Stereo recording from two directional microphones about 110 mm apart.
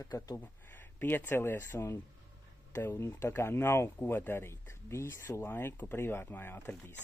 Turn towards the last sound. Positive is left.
turn(degrees=20)  # may be behind; listen again after turning